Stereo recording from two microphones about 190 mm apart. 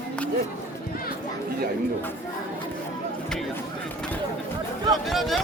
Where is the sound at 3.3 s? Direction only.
5° left (ahead or behind).